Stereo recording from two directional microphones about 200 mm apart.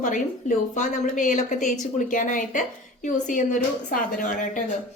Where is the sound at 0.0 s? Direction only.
40° left (ahead or behind).